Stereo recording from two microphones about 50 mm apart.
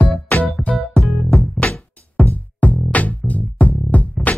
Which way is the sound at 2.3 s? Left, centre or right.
Left.